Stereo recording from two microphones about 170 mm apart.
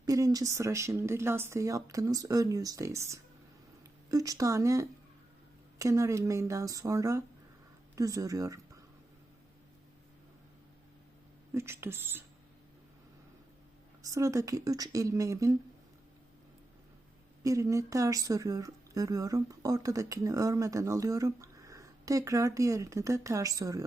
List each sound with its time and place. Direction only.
0.0 s speech: 20° right (ahead or behind)
11.5 s speech: 15° right (ahead or behind)
14.0 s speech: 20° right (ahead or behind)
17.4 s speech: 20° right (ahead or behind)